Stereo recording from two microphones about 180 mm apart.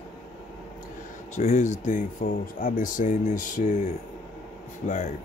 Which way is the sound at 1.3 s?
40° left (ahead or behind).